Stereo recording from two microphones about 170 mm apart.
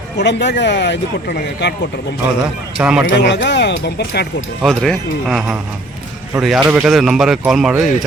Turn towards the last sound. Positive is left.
turn(degrees=0)  # may be behind; listen again after turning